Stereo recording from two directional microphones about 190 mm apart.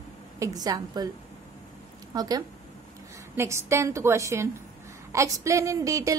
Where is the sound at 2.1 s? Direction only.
20° right (ahead or behind).